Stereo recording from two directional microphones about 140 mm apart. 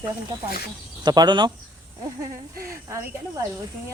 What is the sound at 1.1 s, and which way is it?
Speech, 30° right (ahead or behind).